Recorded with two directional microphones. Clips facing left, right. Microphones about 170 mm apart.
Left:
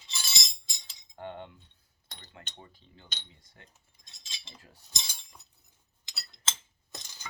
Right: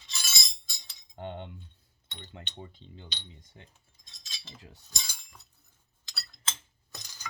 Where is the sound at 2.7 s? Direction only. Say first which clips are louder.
Right 7 dB; 20° right (ahead or behind).